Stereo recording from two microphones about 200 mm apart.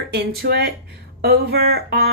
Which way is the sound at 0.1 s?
55° right (ahead or behind).